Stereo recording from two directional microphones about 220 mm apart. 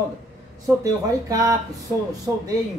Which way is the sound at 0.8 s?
15° right (ahead or behind).